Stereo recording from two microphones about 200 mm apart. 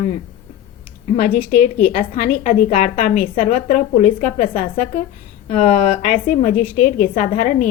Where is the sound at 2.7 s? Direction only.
35° left (ahead or behind).